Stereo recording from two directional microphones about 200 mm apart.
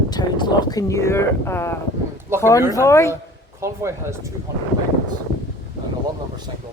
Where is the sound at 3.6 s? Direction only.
15° right (ahead or behind).